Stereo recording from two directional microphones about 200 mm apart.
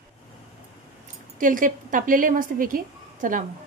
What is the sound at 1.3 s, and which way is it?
A woman's voice, 40° right (ahead or behind).